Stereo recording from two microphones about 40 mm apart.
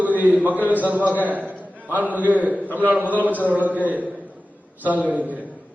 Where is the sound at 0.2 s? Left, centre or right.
Right.